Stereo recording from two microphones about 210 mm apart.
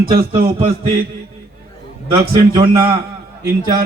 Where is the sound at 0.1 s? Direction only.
45° right (ahead or behind).